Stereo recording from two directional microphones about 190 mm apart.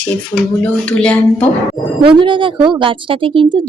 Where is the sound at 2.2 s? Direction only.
25° right (ahead or behind).